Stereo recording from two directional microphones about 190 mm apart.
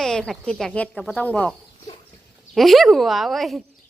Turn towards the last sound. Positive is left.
turn(degrees=0)  # may be behind; listen again after turning